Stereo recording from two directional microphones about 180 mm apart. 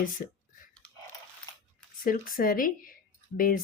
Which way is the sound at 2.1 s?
50° left (ahead or behind).